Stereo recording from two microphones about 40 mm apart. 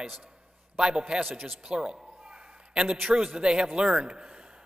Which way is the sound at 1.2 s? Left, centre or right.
Centre.